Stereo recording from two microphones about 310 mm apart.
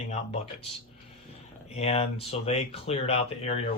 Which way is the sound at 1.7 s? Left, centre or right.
Centre.